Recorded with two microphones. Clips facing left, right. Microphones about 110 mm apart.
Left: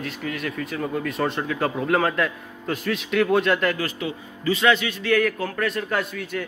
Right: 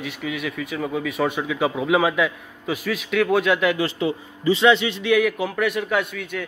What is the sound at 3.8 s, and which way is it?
A man's voice, 25° right (ahead or behind).